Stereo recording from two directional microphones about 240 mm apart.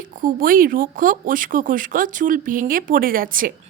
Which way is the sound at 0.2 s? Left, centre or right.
Right.